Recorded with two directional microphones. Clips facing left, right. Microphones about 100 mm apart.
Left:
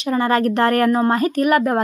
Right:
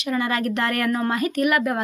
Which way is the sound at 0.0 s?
35° left (ahead or behind).